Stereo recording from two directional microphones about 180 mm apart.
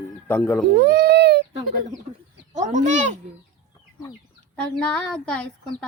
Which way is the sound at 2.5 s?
40° right (ahead or behind).